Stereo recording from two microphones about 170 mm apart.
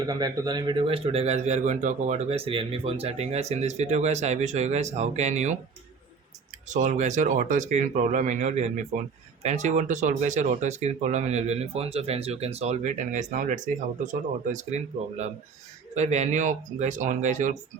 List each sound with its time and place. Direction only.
0.0 s a man's voice: 25° right (ahead or behind); by 5.5 s 45° right (ahead or behind)
6.7 s speech: 45° right (ahead or behind)
16.0 s speech: 45° right (ahead or behind)